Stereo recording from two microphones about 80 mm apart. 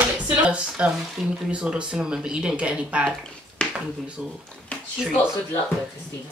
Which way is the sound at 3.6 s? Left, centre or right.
Centre.